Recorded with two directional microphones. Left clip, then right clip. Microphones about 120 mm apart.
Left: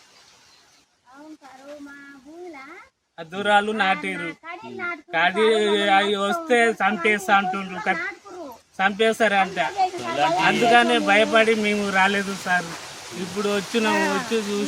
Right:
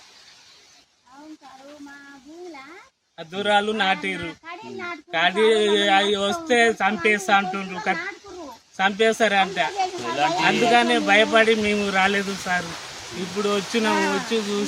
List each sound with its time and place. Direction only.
3.2 s speech: 15° right (ahead or behind)
4.2 s a child's voice: 25° left (ahead or behind)
5.1 s speech: 10° right (ahead or behind)
10.1 s speech: 10° left (ahead or behind)
10.7 s speech: 10° right (ahead or behind)
13.9 s speech: 30° left (ahead or behind)
14.3 s speech: 25° right (ahead or behind)